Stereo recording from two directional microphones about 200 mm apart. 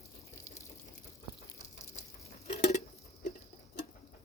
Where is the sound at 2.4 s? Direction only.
35° left (ahead or behind).